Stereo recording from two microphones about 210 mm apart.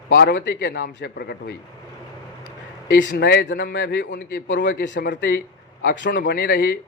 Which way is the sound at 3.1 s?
45° left (ahead or behind).